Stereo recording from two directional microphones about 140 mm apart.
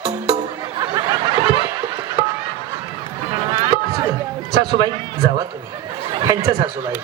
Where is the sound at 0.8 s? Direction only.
25° right (ahead or behind).